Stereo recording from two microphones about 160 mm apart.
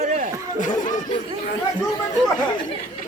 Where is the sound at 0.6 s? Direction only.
50° left (ahead or behind).